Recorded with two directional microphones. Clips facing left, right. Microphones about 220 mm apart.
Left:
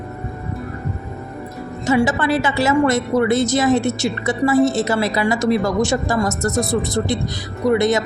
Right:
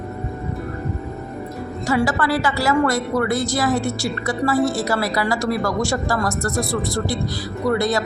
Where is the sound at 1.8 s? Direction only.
20° left (ahead or behind).